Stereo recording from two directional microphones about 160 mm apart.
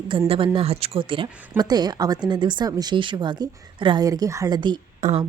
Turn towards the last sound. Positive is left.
turn(degrees=-40)  # may be behind; listen again after turning